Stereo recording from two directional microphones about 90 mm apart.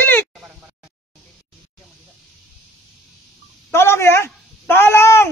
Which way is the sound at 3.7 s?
30° left (ahead or behind).